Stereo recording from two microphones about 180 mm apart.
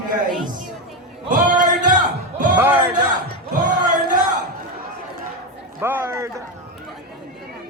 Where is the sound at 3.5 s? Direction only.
45° right (ahead or behind).